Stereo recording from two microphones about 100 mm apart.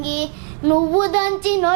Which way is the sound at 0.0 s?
10° right (ahead or behind).